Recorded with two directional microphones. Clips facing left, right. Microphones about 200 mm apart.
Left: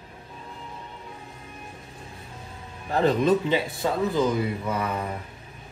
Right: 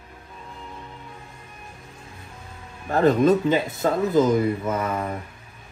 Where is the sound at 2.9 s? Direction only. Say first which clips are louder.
Right 3 dB; 45° right (ahead or behind).